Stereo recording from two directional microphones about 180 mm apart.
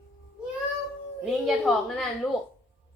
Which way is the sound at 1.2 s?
Centre (ahead or behind).